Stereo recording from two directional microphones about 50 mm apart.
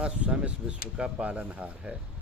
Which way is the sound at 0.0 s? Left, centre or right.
Right.